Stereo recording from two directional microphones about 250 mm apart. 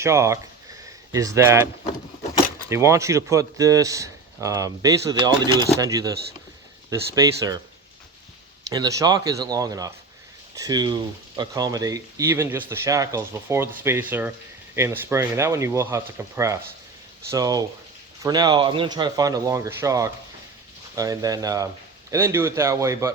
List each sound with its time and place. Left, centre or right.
0.0 s speech: centre
2.6 s speech: centre
8.7 s speech: centre